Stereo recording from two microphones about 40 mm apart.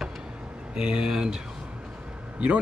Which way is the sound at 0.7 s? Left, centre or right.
Centre.